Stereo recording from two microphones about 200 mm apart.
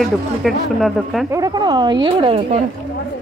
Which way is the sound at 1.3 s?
20° right (ahead or behind).